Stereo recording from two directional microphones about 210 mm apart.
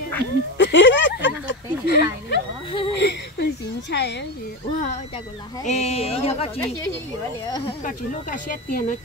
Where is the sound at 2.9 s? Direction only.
55° left (ahead or behind).